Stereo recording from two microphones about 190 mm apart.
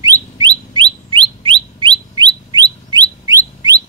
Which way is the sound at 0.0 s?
20° right (ahead or behind).